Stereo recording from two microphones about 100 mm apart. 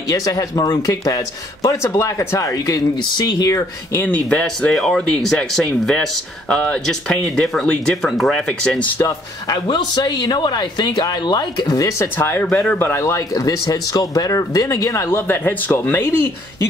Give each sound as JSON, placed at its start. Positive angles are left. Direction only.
{"t": 0.1, "sound": "speech", "side_deg": 35}
{"t": 4.0, "sound": "speech", "side_deg": 15}
{"t": 8.7, "sound": "speech", "side_deg": 15}
{"t": 9.0, "sound": "speech", "side_deg": 45}
{"t": 12.2, "sound": "speech", "side_deg": 25}